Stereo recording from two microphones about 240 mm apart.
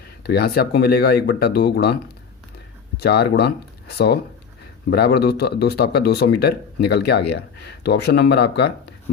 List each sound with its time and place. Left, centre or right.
0.2 s speech: left
3.0 s speech: left